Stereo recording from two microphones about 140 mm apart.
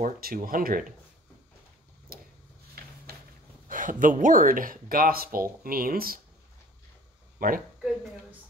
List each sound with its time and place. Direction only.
0.0 s speech: 85° right
2.1 s a sound: 90° right
3.6 s speech: 70° right (ahead or behind); by 6.2 s 90° right
7.3 s speech: 85° right